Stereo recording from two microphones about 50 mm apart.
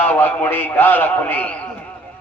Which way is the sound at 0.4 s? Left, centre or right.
Left.